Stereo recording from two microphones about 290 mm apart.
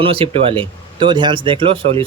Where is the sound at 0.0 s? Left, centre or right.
Centre.